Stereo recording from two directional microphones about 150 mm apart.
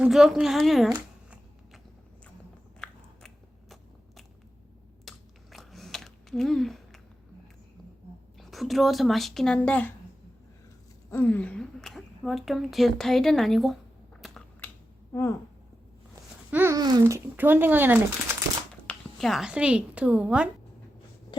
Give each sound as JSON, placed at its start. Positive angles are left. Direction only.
{"t": 0.0, "sound": "a woman's voice", "side_deg": 0}
{"t": 2.8, "sound": "biting", "side_deg": 5}
{"t": 5.0, "sound": "chewing", "side_deg": 0}
{"t": 8.4, "sound": "a woman's voice", "side_deg": 0}
{"t": 11.1, "sound": "a woman's voice", "side_deg": 10}
{"t": 14.6, "sound": "finger snapping", "side_deg": 10}
{"t": 15.1, "sound": "speech", "side_deg": 20}
{"t": 16.5, "sound": "babbling", "side_deg": -15}
{"t": 16.7, "sound": "speech", "side_deg": -25}
{"t": 18.7, "sound": "a woman's voice", "side_deg": 5}